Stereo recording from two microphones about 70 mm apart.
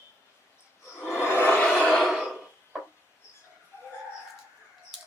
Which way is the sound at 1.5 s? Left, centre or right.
Left.